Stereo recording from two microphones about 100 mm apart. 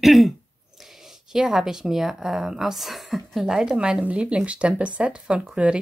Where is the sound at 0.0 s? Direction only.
Centre (ahead or behind).